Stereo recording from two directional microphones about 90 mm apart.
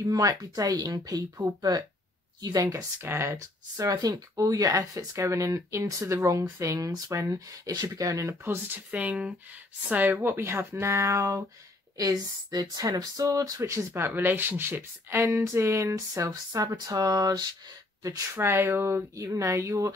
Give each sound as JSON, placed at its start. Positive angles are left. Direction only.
{"t": 0.0, "sound": "speech", "side_deg": -40}
{"t": 2.7, "sound": "speech", "side_deg": -30}
{"t": 8.6, "sound": "speech", "side_deg": -20}